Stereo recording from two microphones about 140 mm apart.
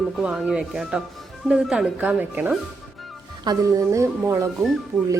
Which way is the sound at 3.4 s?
20° right (ahead or behind).